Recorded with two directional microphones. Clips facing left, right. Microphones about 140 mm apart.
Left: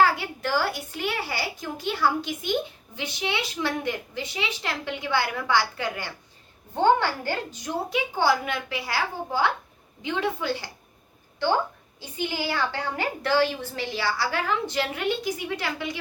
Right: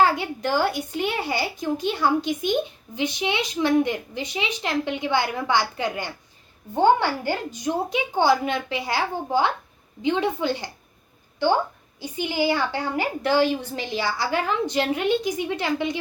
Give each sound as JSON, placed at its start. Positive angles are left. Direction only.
{"t": 0.0, "sound": "a child's voice", "side_deg": -20}
{"t": 11.9, "sound": "a woman's voice", "side_deg": -15}